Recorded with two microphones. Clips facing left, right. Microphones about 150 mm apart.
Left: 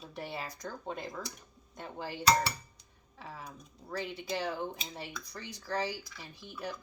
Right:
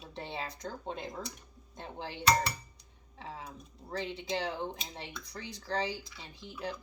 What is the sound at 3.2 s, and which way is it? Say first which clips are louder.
Speech: right 2 dB; 25° right (ahead or behind).